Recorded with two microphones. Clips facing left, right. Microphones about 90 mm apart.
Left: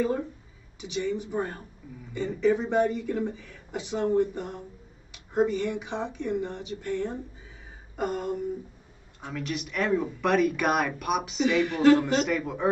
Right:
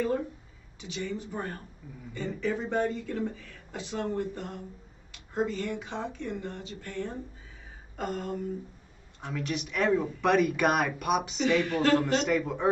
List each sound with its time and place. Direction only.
0.7 s speech: 15° left (ahead or behind)
7.9 s a sound: 15° left (ahead or behind)
9.2 s speech: centre (ahead or behind)
11.5 s speech: 15° left (ahead or behind)
11.9 s speech: 5° left (ahead or behind)